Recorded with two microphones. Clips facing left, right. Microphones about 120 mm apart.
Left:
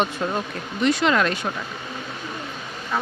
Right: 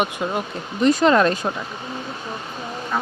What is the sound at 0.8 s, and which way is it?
Speech, 40° right (ahead or behind).